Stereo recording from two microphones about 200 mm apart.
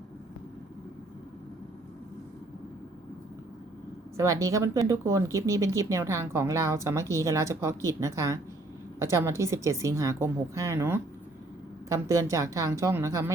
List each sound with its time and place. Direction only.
4.2 s speech: 15° right (ahead or behind)